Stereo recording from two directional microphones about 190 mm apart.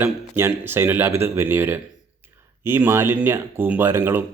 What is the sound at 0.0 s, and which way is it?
Speech, 10° right (ahead or behind).